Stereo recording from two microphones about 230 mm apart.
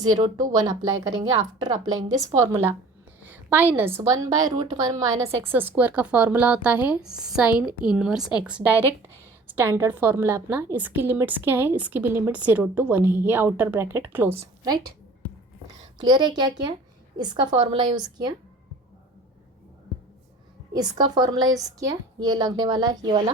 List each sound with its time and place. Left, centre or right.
0.1 s a woman's voice: centre
16.0 s a woman's voice: centre
20.7 s a woman's voice: centre